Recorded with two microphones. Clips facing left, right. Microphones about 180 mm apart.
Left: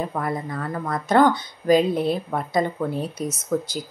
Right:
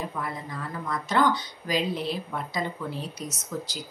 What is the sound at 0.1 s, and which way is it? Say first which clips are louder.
Speech: left 7 dB; 55° left (ahead or behind).